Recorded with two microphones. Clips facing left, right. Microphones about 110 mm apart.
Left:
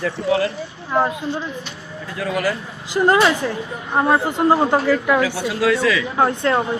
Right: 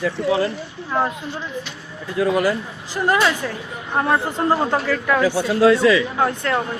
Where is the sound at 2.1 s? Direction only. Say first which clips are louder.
Right 4 dB; 25° right (ahead or behind).